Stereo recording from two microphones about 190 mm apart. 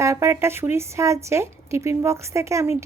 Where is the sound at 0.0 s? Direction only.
15° right (ahead or behind).